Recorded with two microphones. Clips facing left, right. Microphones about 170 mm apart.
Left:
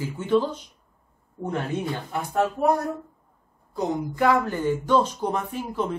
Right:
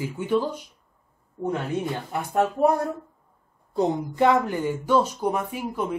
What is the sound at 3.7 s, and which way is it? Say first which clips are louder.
Speech: right 3 dB; 20° right (ahead or behind).